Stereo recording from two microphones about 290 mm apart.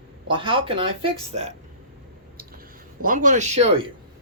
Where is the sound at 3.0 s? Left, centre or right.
Right.